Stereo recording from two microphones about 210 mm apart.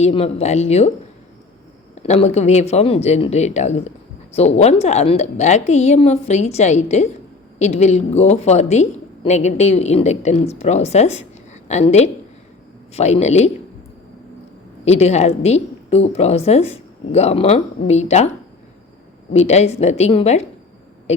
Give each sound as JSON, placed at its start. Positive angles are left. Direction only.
{"t": 0.0, "sound": "a woman's voice", "side_deg": 30}
{"t": 2.0, "sound": "a woman's voice", "side_deg": 30}
{"t": 14.8, "sound": "a woman's voice", "side_deg": 30}
{"t": 19.3, "sound": "a woman's voice", "side_deg": 30}